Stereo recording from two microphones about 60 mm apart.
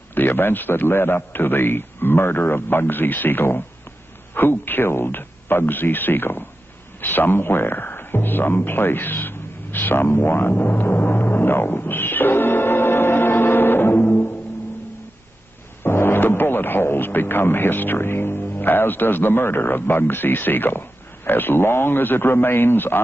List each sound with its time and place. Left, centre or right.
0.1 s a man's voice: left
7.0 s a sound: left
15.8 s speech: left